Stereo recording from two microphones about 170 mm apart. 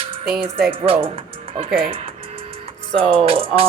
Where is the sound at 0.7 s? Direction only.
35° right (ahead or behind).